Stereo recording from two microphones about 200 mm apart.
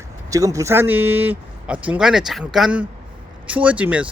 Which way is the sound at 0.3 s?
15° right (ahead or behind).